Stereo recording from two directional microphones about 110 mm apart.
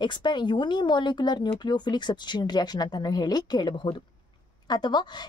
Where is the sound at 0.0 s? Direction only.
45° left (ahead or behind).